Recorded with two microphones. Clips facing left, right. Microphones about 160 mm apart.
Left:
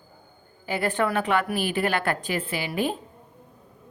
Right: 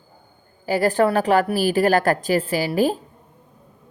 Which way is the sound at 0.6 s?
40° right (ahead or behind).